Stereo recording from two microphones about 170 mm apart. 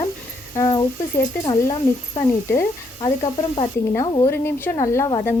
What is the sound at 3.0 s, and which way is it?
Speech, 30° left (ahead or behind).